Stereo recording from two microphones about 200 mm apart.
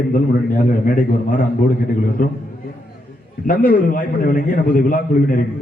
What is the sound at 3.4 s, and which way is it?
A man's voice, 45° left (ahead or behind).